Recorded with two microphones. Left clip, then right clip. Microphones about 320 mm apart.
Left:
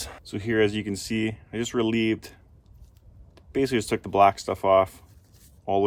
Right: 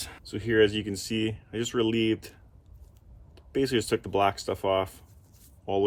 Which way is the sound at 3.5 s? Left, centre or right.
Centre.